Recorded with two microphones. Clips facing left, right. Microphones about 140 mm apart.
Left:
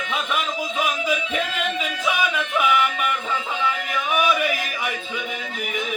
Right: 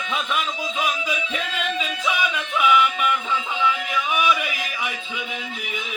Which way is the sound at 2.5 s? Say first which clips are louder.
Right 2 dB; 45° left (ahead or behind).